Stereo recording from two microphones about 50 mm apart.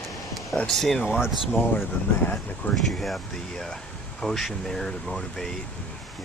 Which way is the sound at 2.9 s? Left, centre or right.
Centre.